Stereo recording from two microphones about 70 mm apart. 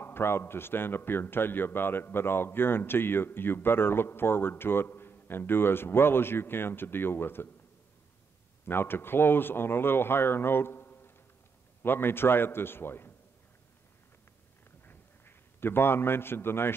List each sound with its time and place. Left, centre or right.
0.0 s a man's voice: left
8.6 s a man's voice: left
14.9 s a sound: left